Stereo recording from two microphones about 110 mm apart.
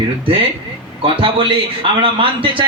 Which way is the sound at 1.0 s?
50° right (ahead or behind).